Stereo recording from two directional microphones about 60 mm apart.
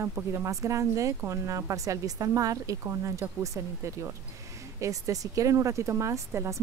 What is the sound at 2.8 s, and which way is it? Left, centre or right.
Speech, right.